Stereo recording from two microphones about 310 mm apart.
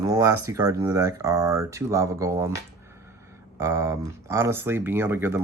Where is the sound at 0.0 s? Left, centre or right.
Centre.